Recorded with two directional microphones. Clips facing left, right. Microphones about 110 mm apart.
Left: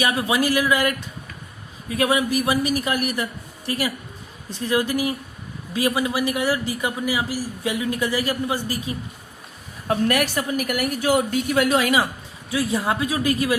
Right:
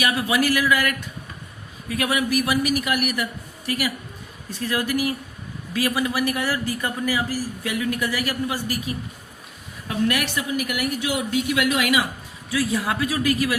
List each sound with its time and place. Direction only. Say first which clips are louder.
0.0 s speech: left 1 dB; 30° left (ahead or behind)
9.8 s a woman's voice: left 3 dB; 45° left (ahead or behind); by 13.6 s 25° left (ahead or behind)